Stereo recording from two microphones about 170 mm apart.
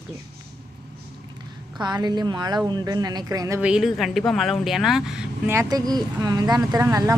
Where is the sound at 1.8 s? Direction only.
25° right (ahead or behind).